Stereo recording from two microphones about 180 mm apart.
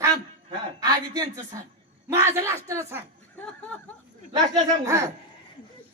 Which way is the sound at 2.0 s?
15° right (ahead or behind).